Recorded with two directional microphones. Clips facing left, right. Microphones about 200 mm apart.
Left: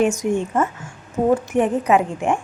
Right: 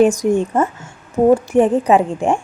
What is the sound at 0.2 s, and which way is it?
A woman's voice, 35° right (ahead or behind).